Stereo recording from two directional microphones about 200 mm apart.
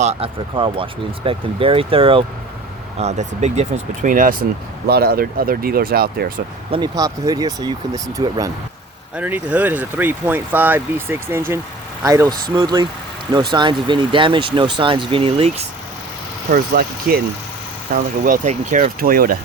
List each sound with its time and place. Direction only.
0.0 s speech: 30° right (ahead or behind); by 6.4 s 50° right (ahead or behind)
6.7 s speech: 25° right (ahead or behind)
16.5 s speech: 45° right (ahead or behind)